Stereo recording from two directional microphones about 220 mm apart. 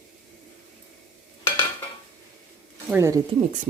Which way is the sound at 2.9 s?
10° right (ahead or behind).